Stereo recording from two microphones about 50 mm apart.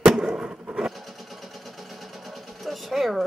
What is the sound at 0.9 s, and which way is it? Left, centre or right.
Vehicle, centre.